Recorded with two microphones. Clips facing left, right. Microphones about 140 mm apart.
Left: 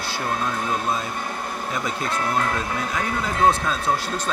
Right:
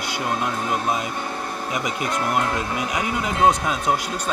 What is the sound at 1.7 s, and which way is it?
Speech, 15° right (ahead or behind).